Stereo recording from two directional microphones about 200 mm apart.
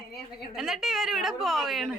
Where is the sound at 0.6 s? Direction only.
Centre (ahead or behind).